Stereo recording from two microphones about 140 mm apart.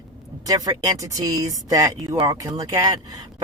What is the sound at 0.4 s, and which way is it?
Speech, 25° right (ahead or behind).